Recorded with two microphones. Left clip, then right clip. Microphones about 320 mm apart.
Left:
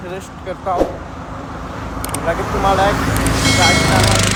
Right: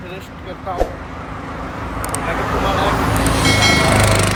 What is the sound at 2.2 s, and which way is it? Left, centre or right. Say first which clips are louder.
Speech: left 4 dB; right.